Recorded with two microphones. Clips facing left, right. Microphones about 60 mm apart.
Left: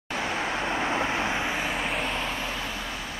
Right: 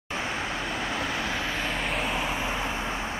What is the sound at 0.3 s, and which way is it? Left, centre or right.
Vehicle, left.